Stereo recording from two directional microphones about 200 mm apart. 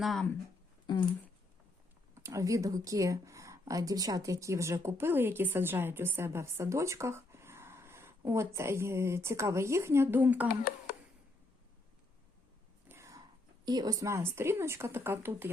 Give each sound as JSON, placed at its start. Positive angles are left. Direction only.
{"t": 0.0, "sound": "speech", "side_deg": 0}
{"t": 0.9, "sound": "speech", "side_deg": 20}
{"t": 2.1, "sound": "speech", "side_deg": -15}
{"t": 12.9, "sound": "whispering", "side_deg": -15}
{"t": 13.7, "sound": "speech", "side_deg": -20}